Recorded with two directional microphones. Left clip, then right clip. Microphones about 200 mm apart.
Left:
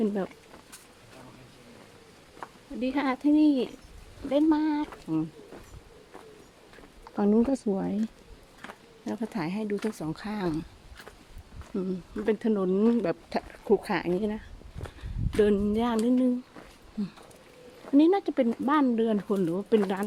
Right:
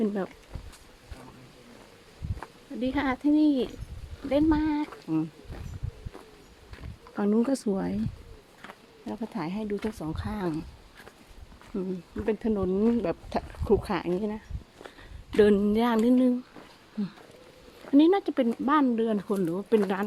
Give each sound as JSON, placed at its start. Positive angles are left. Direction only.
{"t": 0.0, "sound": "speech", "side_deg": 5}
{"t": 2.8, "sound": "speech", "side_deg": 0}
{"t": 7.2, "sound": "speech", "side_deg": 15}
{"t": 7.4, "sound": "speech", "side_deg": 0}
{"t": 9.0, "sound": "speech", "side_deg": 10}
{"t": 11.7, "sound": "speech", "side_deg": 5}
{"t": 15.4, "sound": "a sound", "side_deg": -15}
{"t": 17.9, "sound": "speech", "side_deg": -5}